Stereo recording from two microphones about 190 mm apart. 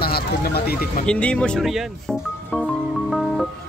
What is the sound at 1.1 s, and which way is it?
Speech, 5° left (ahead or behind).